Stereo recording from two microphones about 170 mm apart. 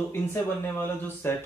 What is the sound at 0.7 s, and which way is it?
Speech, 15° left (ahead or behind).